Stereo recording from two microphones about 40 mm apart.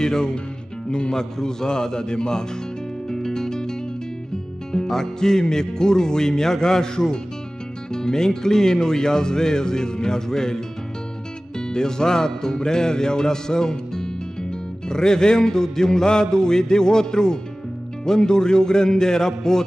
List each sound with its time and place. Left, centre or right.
0.0 s speech: centre
3.1 s guitar: centre
4.7 s speech: centre
11.7 s speech: centre